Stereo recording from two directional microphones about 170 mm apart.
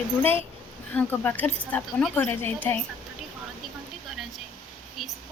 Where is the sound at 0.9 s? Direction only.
10° left (ahead or behind).